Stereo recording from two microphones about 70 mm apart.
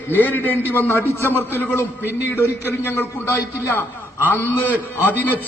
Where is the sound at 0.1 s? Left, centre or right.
Left.